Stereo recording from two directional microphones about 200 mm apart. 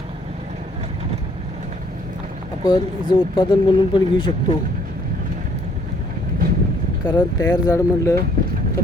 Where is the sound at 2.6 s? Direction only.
20° left (ahead or behind).